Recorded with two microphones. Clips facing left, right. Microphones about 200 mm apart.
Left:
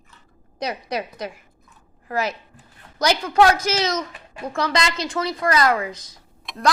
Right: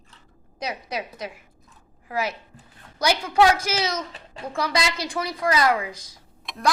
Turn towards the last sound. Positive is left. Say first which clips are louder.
# left 3 dB
turn(degrees=0)  # may be behind; listen again after turning